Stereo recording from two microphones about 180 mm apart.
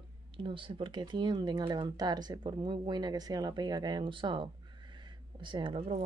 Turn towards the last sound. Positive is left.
turn(degrees=-30)  # may be behind; listen again after turning